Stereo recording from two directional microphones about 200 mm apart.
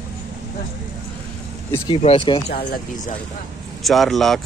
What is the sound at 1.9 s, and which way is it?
Speech, 25° left (ahead or behind).